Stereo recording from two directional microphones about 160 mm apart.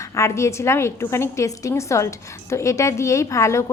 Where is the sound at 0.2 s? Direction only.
15° left (ahead or behind).